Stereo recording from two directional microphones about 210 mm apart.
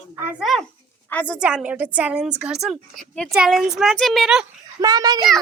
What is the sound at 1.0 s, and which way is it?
Speech, 5° left (ahead or behind).